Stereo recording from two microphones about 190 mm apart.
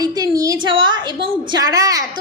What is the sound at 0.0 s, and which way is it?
A woman's voice, 20° right (ahead or behind).